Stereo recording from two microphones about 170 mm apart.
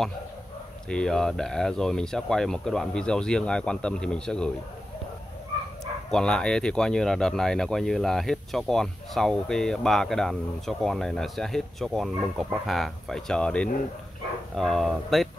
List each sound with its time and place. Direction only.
0.8 s speech: 5° left (ahead or behind)
6.0 s speech: 5° left (ahead or behind)